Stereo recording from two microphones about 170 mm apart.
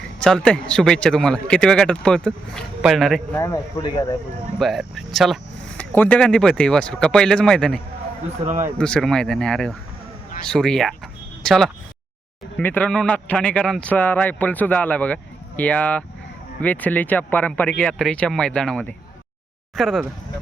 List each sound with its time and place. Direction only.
0.2 s a man's voice: 5° left (ahead or behind)
3.4 s speech: 20° left (ahead or behind)
4.6 s a man's voice: centre (ahead or behind)
8.4 s speech: 15° right (ahead or behind)
8.8 s a man's voice: 5° left (ahead or behind)